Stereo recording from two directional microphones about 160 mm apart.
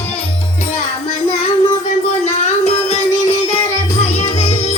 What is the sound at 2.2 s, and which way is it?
Music, 45° left (ahead or behind).